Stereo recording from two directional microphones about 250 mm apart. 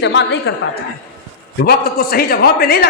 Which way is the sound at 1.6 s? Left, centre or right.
Left.